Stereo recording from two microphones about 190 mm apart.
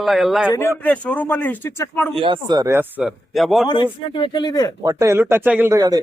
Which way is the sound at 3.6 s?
25° left (ahead or behind).